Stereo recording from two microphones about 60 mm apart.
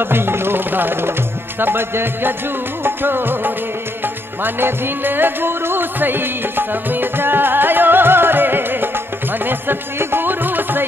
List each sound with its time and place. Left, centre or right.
0.0 s music: right